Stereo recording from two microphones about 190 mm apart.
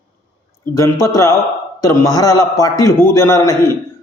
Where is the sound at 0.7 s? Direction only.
15° left (ahead or behind).